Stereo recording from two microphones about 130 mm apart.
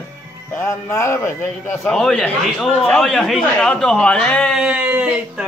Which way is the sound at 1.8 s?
5° left (ahead or behind).